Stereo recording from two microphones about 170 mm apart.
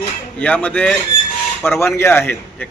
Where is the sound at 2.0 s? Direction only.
15° left (ahead or behind).